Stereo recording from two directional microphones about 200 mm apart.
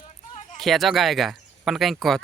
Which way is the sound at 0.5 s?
Centre (ahead or behind).